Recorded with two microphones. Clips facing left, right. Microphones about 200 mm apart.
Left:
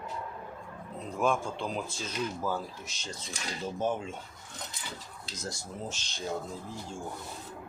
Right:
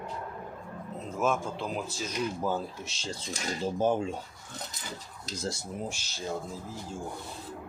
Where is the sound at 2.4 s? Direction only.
20° right (ahead or behind).